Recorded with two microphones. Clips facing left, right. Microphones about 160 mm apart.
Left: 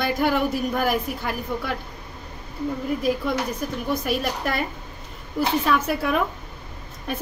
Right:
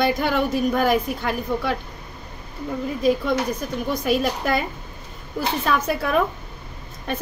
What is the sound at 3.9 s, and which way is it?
Speech, centre (ahead or behind).